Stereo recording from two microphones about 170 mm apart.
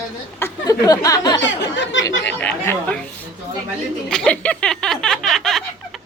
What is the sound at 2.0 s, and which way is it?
A woman's voice, 10° left (ahead or behind).